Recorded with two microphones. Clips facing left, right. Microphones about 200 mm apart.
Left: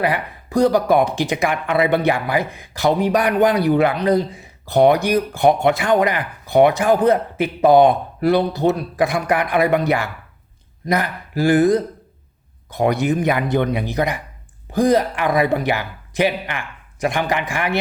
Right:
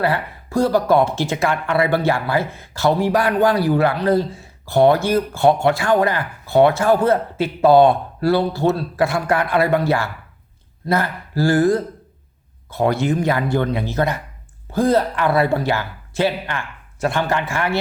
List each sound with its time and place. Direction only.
0.0 s speech: 15° left (ahead or behind)